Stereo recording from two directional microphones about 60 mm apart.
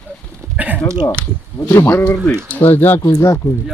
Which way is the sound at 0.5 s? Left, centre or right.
Right.